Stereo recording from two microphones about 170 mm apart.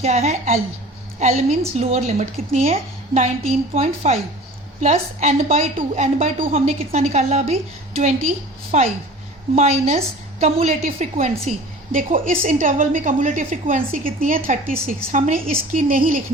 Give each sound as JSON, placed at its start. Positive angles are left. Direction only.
{"t": 0.0, "sound": "a woman's voice", "side_deg": -40}